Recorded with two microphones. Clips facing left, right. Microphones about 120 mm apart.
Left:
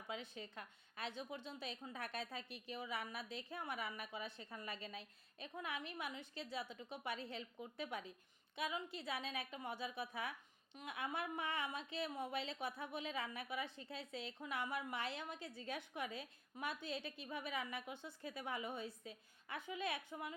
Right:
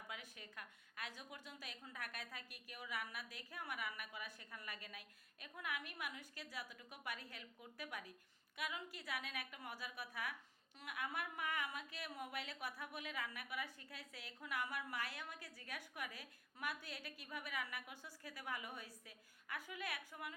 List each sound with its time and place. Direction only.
0.1 s a woman's voice: 25° left (ahead or behind)